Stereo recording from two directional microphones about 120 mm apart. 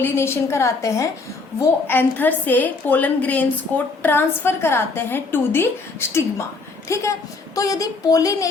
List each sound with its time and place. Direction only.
0.0 s a woman's voice: 20° left (ahead or behind)